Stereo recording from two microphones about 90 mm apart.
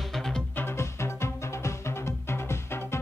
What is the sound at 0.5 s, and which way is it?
Music, 30° left (ahead or behind).